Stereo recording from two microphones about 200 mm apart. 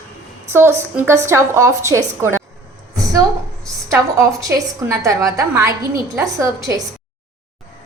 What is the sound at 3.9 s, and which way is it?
A woman's voice, 15° right (ahead or behind).